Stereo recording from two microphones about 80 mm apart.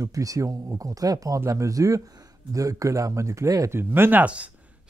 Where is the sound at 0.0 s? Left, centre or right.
Right.